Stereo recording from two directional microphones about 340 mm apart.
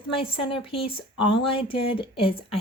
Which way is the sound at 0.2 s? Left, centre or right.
Centre.